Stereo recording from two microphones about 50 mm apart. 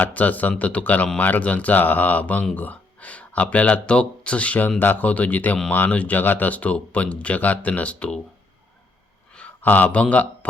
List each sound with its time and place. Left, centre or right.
0.0 s a man's voice: left
9.6 s speech: left